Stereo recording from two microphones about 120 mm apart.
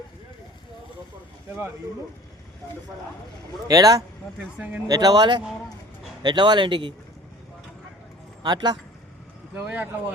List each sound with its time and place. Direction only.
3.7 s a man's voice: 30° right (ahead or behind)
4.4 s speech: 10° right (ahead or behind)
4.9 s speech: 35° right (ahead or behind)
5.4 s speech: centre (ahead or behind)
6.2 s speech: 40° right (ahead or behind)
8.4 s speech: 35° right (ahead or behind)
9.6 s speech: 10° right (ahead or behind)